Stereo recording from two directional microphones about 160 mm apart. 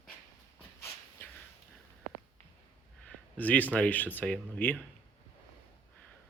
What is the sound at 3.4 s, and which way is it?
Speech, 10° left (ahead or behind).